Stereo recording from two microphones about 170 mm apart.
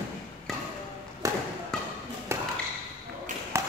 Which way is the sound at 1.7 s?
5° left (ahead or behind).